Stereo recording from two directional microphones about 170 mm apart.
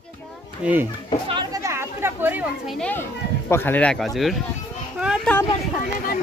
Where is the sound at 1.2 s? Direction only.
25° right (ahead or behind).